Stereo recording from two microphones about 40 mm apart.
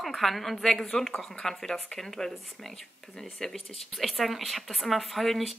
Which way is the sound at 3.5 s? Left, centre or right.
Centre.